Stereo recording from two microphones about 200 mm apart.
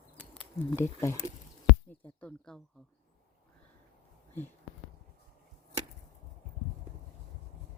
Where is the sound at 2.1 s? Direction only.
5° left (ahead or behind).